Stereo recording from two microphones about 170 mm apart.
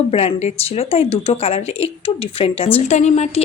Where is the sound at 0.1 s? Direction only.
35° left (ahead or behind).